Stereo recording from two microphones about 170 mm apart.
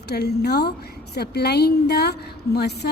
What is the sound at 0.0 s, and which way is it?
A woman's voice, 70° left (ahead or behind).